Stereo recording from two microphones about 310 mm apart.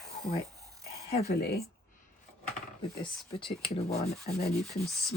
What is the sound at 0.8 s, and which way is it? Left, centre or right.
Speech, left.